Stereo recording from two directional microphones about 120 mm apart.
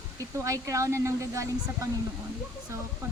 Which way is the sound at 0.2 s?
25° right (ahead or behind).